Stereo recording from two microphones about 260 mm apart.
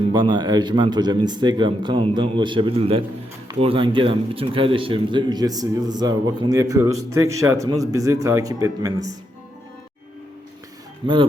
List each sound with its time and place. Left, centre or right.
0.1 s a man's voice: centre
11.0 s speech: centre